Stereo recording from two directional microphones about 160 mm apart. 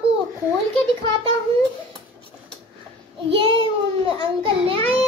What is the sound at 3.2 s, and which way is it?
A child's voice, 35° right (ahead or behind).